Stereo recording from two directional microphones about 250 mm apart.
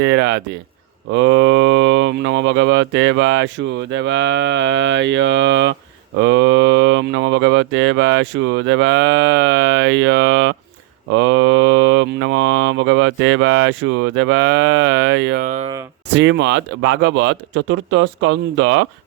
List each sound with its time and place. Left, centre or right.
0.0 s speech: right
16.1 s speech: right